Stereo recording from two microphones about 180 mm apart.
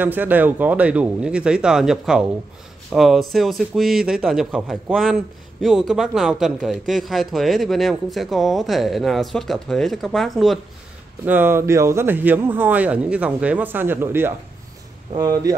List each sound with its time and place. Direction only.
0.0 s a man's voice: 10° right (ahead or behind)
11.2 s speech: 10° right (ahead or behind)